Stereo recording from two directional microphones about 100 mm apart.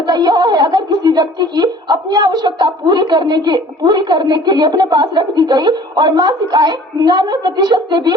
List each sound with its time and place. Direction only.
0.0 s speech: 45° right (ahead or behind)